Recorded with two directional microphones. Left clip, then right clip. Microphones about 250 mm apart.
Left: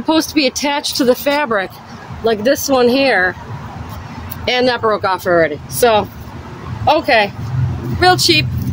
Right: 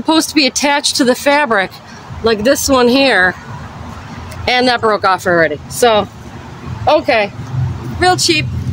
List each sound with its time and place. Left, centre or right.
0.0 s speech: right
4.5 s speech: right
8.0 s speech: centre